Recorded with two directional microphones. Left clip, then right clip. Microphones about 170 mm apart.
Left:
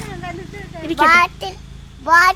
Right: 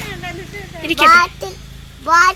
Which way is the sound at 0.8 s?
10° left (ahead or behind).